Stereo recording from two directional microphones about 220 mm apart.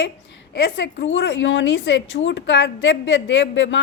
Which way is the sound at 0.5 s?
45° left (ahead or behind).